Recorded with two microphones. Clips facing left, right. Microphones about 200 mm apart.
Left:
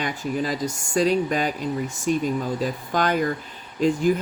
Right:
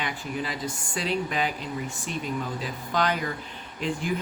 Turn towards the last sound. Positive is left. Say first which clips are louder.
# left 9 dB
turn(degrees=40)  # may be behind; listen again after turning